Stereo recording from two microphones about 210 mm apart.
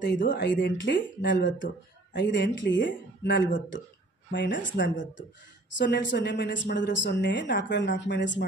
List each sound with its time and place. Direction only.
0.3 s speech: 55° left (ahead or behind)
4.8 s speech: 35° left (ahead or behind)
5.7 s speech: 55° left (ahead or behind)